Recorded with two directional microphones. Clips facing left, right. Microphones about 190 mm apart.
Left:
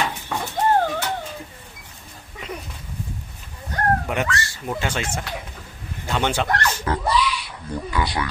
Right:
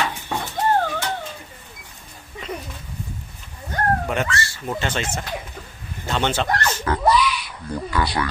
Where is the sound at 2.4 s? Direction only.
10° left (ahead or behind).